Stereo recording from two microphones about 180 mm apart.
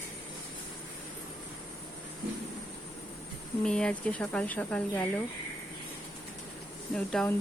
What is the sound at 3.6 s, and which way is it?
Speech, 5° left (ahead or behind).